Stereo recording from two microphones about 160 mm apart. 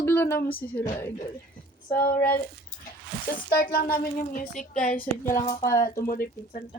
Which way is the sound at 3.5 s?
65° left (ahead or behind).